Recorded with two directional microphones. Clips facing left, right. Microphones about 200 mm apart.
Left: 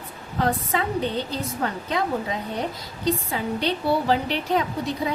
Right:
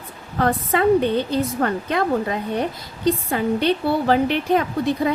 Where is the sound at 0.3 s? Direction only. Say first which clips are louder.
Right 4 dB; 55° right (ahead or behind).